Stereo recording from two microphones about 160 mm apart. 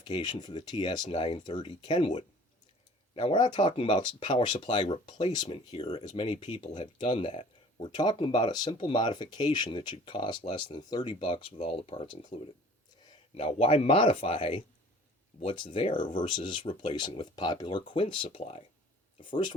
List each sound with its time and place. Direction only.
0.0 s speech: 30° left (ahead or behind)
3.2 s speech: 30° left (ahead or behind)